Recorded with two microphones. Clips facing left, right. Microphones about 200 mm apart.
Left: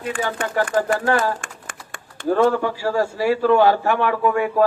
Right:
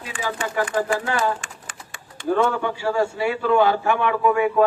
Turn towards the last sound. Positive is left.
turn(degrees=45)  # may be behind; listen again after turning